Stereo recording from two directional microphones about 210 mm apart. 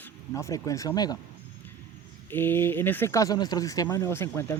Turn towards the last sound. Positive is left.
turn(degrees=10)  # may be behind; listen again after turning